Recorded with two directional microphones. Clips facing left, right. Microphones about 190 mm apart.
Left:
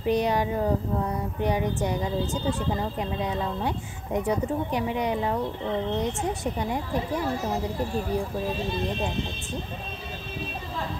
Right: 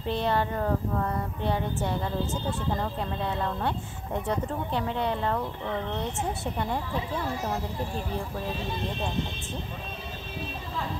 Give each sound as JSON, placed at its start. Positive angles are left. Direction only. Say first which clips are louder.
{"t": 0.0, "sound": "speech", "louder": "left 3 dB", "side_deg": 15}